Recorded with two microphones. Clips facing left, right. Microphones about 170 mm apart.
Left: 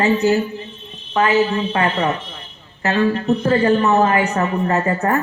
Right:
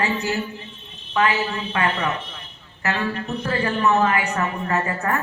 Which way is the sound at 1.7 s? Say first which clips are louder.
Left 5 dB; 30° left (ahead or behind).